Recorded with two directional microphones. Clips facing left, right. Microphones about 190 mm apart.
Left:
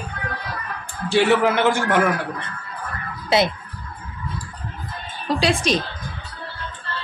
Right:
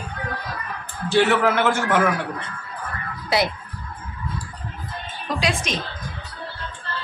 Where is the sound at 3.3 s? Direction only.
25° left (ahead or behind).